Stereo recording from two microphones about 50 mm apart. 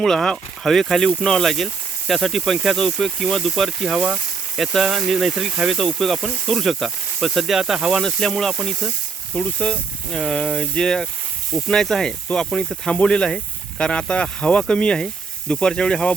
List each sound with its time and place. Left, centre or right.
0.0 s speech: centre
3.8 s speech: centre
4.5 s speech: centre
8.0 s speech: centre
9.3 s speech: centre